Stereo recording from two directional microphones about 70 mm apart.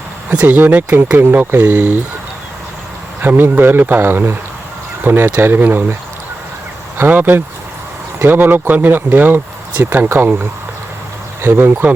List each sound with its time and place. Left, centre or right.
0.4 s speech: right
3.2 s speech: right
7.0 s speech: right
11.4 s speech: right